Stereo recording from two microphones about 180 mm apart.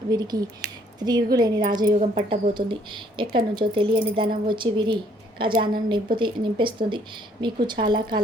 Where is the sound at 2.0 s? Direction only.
35° right (ahead or behind).